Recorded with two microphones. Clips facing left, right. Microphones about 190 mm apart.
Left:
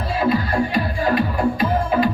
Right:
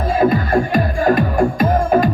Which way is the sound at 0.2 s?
50° right (ahead or behind).